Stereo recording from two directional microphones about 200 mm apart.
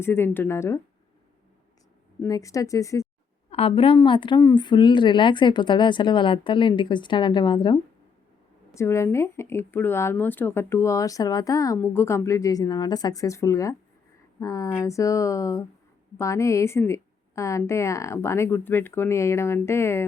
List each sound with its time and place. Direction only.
0.0 s speech: 10° left (ahead or behind)
2.2 s speech: 15° left (ahead or behind)
3.5 s a woman's voice: 30° left (ahead or behind); by 20.1 s 15° left (ahead or behind)